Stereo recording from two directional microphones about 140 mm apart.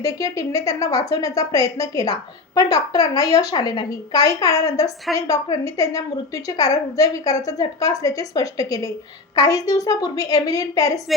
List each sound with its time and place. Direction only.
0.0 s a woman's voice: 25° left (ahead or behind)